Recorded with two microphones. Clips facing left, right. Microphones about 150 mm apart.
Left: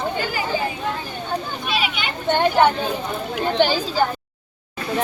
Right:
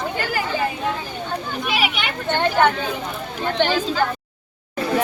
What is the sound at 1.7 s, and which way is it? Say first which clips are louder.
Speech: right 1 dB; 80° right.